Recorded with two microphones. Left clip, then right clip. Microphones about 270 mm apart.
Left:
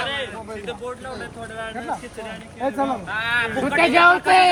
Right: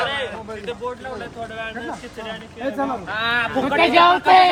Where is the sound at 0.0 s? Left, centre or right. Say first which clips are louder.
Right 3 dB; right.